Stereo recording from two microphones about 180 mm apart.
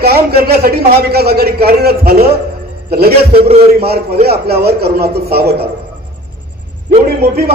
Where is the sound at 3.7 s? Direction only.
60° right (ahead or behind).